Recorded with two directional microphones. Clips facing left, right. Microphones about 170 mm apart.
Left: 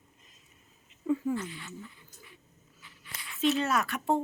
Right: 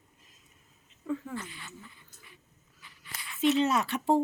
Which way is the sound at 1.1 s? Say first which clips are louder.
Left 6 dB; 10° left (ahead or behind).